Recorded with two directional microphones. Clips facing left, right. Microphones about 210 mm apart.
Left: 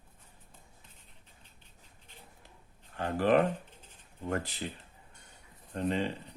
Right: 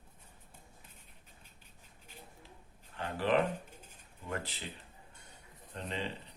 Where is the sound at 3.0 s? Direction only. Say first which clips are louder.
Left 5 dB; 50° left (ahead or behind).